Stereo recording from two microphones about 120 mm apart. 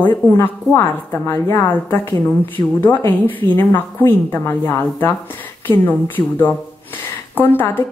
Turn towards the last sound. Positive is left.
turn(degrees=15)  # may be behind; listen again after turning